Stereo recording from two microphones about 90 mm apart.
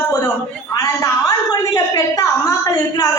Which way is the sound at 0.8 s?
40° left (ahead or behind).